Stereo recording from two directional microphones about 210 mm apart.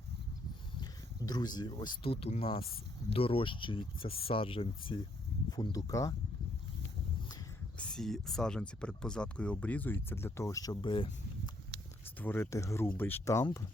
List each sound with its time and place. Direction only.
0.8 s speech: 20° left (ahead or behind)
7.8 s speech: 5° left (ahead or behind); by 11.5 s 25° left (ahead or behind)
12.0 s speech: 10° left (ahead or behind)